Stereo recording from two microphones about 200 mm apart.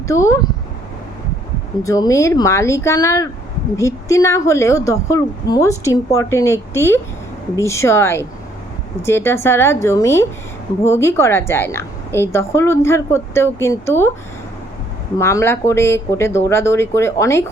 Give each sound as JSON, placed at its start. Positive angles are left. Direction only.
{"t": 0.1, "sound": "a woman's voice", "side_deg": 15}
{"t": 1.8, "sound": "a woman's voice", "side_deg": 15}
{"t": 15.2, "sound": "a woman's voice", "side_deg": 15}